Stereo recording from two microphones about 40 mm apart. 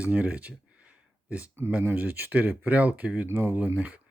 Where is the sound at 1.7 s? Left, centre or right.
Right.